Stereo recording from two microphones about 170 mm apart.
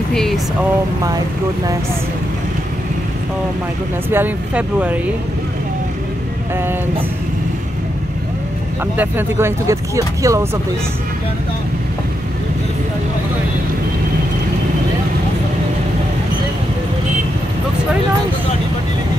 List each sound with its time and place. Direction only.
0.1 s speech: 5° left (ahead or behind)
4.1 s speech: 10° right (ahead or behind)
8.9 s speech: 10° right (ahead or behind)